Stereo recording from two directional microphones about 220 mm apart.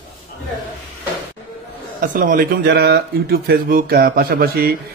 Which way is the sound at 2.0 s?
40° right (ahead or behind).